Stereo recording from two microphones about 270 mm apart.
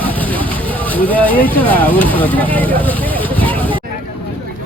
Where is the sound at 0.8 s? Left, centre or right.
Centre.